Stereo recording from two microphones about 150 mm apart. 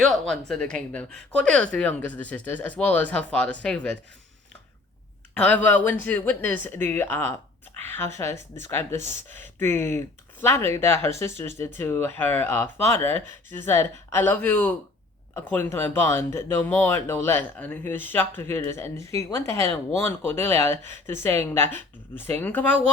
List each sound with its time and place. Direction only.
0.1 s speech: 5° left (ahead or behind)
5.3 s speech: 10° left (ahead or behind)